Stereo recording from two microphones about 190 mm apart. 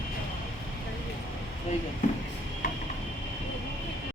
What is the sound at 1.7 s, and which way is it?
Speech, 40° left (ahead or behind).